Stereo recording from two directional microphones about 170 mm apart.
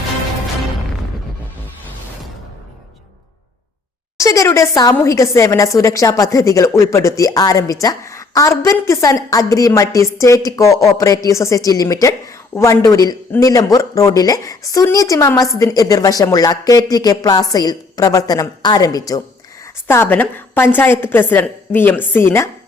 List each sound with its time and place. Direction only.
4.2 s a woman's voice: 20° left (ahead or behind)